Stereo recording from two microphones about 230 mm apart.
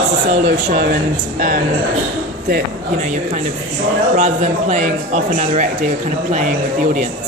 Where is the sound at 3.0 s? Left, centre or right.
Right.